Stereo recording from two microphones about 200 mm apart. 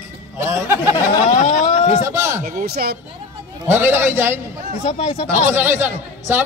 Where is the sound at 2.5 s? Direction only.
50° right (ahead or behind).